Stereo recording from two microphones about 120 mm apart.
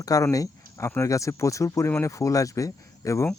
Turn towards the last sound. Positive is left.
turn(degrees=25)  # may be behind; listen again after turning